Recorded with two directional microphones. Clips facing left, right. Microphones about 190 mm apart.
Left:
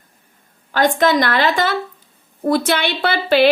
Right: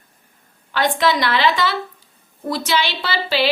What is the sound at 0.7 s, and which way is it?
Speech, 45° left (ahead or behind).